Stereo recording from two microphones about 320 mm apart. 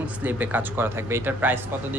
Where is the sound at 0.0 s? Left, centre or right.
Centre.